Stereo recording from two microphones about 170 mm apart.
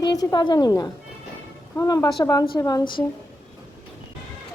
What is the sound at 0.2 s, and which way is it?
Speech, 25° left (ahead or behind).